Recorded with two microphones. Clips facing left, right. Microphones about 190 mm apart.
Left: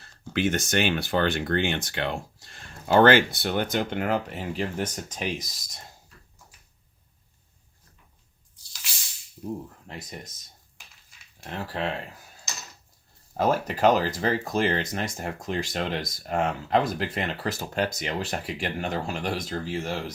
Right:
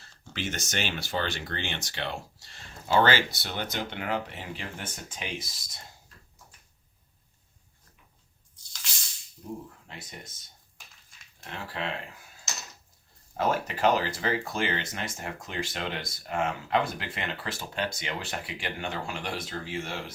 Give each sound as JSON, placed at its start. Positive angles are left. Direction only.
{"t": 0.0, "sound": "speech", "side_deg": 55}
{"t": 11.5, "sound": "speech", "side_deg": 40}
{"t": 13.3, "sound": "speech", "side_deg": 40}